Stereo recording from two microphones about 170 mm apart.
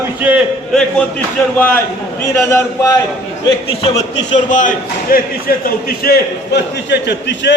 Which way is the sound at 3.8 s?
40° left (ahead or behind).